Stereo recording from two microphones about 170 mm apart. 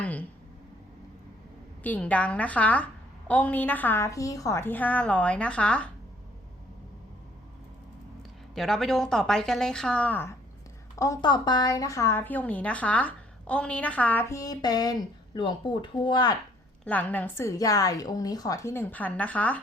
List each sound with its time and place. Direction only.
0.0 s a sound: 10° left (ahead or behind)
1.8 s a woman's voice: 10° left (ahead or behind)
8.5 s a woman's voice: centre (ahead or behind); by 16.3 s 25° left (ahead or behind)
16.8 s a woman's voice: 10° left (ahead or behind)